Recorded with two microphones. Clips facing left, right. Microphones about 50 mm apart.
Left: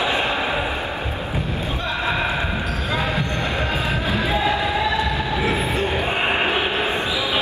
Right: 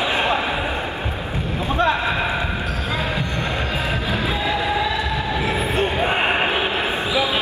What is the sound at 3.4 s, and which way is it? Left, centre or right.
Music, left.